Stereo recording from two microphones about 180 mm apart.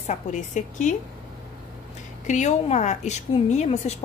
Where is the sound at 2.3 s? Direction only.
40° left (ahead or behind).